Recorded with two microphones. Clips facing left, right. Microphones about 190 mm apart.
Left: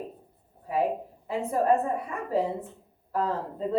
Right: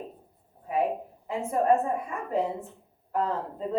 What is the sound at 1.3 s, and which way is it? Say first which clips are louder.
A woman's voice: even; 35° left (ahead or behind).